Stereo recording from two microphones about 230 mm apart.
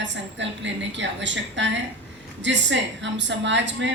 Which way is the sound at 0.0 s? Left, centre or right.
Right.